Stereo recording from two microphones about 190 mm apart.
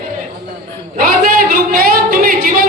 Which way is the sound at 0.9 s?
45° right (ahead or behind).